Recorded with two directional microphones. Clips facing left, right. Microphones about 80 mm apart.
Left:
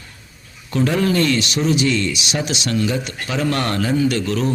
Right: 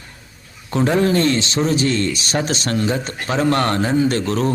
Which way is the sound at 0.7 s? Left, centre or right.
Right.